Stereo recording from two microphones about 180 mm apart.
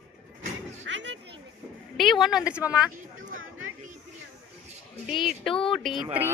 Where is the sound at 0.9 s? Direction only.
80° right.